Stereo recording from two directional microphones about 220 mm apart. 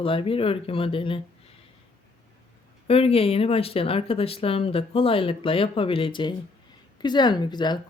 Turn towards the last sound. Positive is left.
turn(degrees=20)  # may be behind; listen again after turning